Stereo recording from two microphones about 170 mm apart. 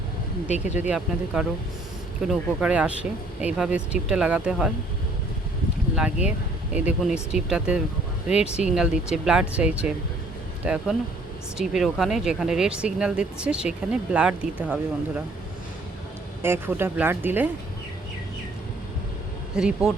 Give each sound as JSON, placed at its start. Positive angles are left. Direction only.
{"t": 0.5, "sound": "speech", "side_deg": 45}
{"t": 0.8, "sound": "speech", "side_deg": -5}
{"t": 6.0, "sound": "speech", "side_deg": -5}
{"t": 16.4, "sound": "speech", "side_deg": -15}
{"t": 19.5, "sound": "speech", "side_deg": -5}